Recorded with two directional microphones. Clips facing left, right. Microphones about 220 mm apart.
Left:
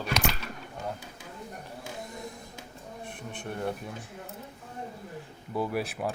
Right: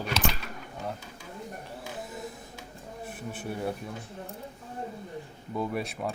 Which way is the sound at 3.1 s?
5° right (ahead or behind).